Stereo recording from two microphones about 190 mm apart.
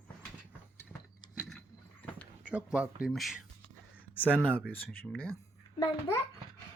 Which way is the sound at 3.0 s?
Centre (ahead or behind).